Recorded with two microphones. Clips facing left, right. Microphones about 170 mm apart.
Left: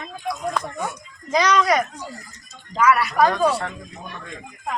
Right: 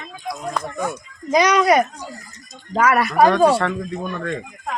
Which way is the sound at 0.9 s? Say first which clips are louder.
Right 5 dB; 20° right (ahead or behind).